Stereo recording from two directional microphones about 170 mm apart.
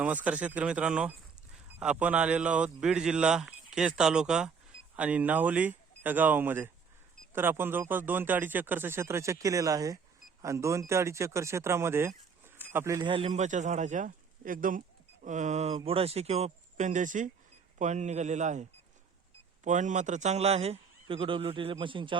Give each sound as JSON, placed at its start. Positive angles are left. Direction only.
{"t": 0.0, "sound": "a man's voice", "side_deg": -10}
{"t": 13.1, "sound": "a man's voice", "side_deg": -35}